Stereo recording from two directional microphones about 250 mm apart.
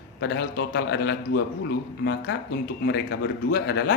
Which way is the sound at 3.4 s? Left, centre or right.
Left.